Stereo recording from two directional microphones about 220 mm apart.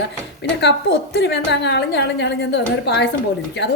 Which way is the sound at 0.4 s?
50° left (ahead or behind).